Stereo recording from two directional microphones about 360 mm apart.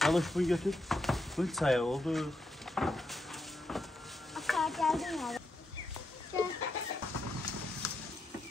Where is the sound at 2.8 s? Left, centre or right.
Centre.